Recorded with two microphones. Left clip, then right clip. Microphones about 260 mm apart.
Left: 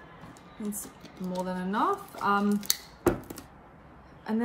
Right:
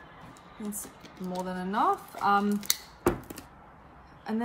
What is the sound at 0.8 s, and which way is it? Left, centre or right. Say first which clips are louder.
Speech: even; centre.